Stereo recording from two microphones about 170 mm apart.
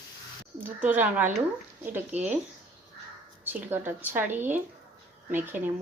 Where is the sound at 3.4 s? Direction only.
10° right (ahead or behind).